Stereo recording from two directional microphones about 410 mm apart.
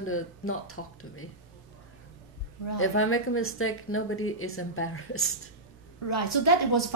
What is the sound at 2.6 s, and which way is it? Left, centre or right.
A woman's voice, left.